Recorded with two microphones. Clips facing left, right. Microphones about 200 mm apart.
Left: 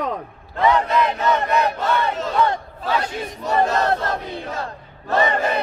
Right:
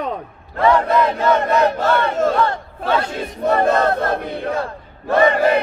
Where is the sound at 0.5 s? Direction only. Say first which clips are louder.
Right 3 dB; 20° left (ahead or behind).